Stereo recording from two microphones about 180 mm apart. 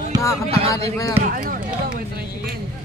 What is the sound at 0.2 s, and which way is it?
Speech, 15° left (ahead or behind).